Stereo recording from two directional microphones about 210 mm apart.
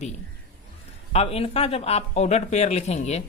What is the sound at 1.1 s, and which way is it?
Speech, 30° left (ahead or behind).